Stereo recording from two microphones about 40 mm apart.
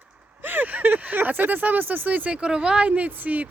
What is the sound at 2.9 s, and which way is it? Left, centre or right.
Speech, right.